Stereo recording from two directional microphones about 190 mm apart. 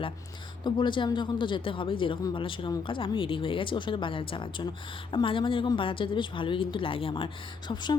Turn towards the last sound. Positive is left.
turn(degrees=25)  # may be behind; listen again after turning